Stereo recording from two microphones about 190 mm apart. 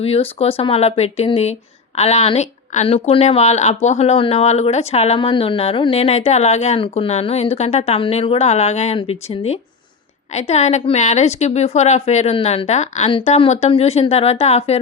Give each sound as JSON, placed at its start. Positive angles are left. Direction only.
{"t": 0.0, "sound": "speech", "side_deg": 30}